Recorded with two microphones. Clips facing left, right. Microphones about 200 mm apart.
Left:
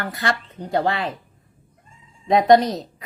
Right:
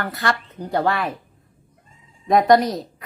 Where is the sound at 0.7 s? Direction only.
20° left (ahead or behind).